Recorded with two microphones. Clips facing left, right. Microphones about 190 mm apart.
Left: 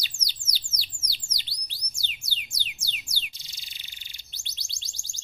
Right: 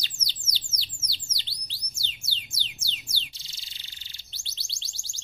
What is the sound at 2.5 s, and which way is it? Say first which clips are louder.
Music: even; 15° left (ahead or behind).